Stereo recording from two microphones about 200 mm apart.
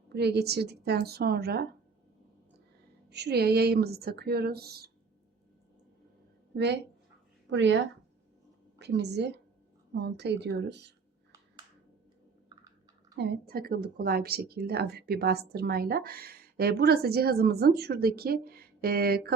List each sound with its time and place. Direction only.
0.1 s speech: 55° right (ahead or behind)
3.1 s speech: 55° right (ahead or behind)
7.5 s speech: 65° right (ahead or behind)
8.8 s speech: 55° right (ahead or behind)
13.1 s speech: 55° right (ahead or behind)